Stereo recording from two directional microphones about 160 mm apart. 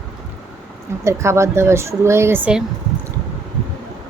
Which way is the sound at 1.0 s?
15° right (ahead or behind).